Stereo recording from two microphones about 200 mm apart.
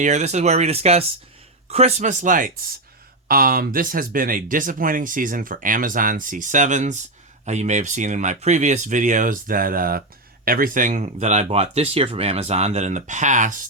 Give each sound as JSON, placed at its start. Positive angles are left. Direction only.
{"t": 0.0, "sound": "speech", "side_deg": -35}